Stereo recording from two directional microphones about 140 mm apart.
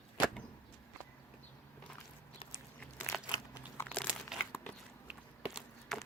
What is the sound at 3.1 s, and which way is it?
Crumpling, 5° right (ahead or behind).